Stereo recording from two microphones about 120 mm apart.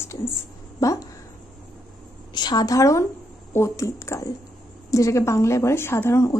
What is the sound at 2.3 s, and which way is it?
A woman's voice, 35° left (ahead or behind).